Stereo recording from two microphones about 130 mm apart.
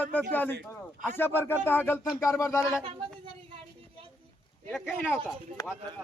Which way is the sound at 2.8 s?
40° right (ahead or behind).